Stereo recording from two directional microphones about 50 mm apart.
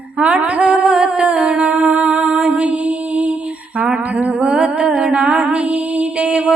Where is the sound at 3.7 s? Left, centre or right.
Right.